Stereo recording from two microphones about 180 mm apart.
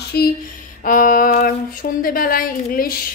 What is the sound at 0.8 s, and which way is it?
A woman's voice, 50° left (ahead or behind).